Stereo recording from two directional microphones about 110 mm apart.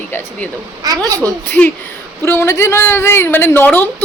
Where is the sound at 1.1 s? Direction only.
30° right (ahead or behind).